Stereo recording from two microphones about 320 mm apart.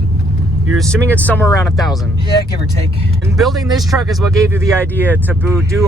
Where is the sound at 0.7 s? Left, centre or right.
Centre.